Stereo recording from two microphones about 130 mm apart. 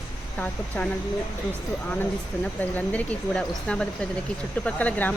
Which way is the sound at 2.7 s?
10° left (ahead or behind).